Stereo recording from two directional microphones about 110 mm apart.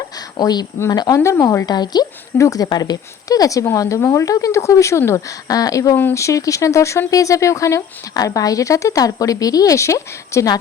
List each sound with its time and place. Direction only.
0.3 s speech: 40° left (ahead or behind)